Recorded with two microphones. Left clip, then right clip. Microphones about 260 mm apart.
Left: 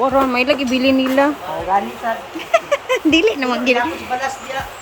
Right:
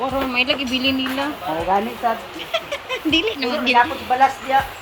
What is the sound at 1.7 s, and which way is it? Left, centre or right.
Speech, right.